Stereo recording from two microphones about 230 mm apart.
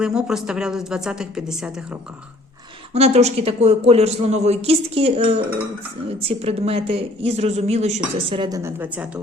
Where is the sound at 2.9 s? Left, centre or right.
Right.